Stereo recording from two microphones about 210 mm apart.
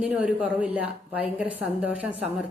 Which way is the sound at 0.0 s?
5° right (ahead or behind).